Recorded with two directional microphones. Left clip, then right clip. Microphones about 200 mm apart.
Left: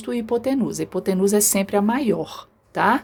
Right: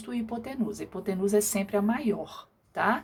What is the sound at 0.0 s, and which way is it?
Speech, 40° left (ahead or behind).